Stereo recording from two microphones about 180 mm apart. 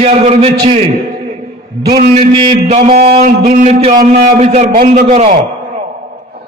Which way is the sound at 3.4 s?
45° right (ahead or behind).